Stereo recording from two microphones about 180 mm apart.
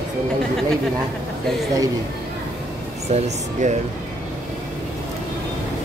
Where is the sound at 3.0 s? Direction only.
40° right (ahead or behind).